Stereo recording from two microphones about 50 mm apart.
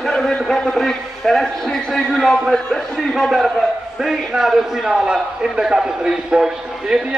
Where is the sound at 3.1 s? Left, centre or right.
Centre.